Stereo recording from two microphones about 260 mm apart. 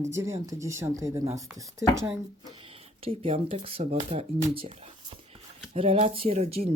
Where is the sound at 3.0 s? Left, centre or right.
Right.